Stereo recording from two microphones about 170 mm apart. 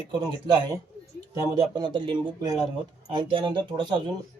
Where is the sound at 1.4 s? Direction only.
25° right (ahead or behind).